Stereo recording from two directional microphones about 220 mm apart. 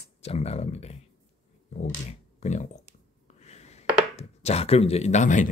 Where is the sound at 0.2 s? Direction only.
30° left (ahead or behind).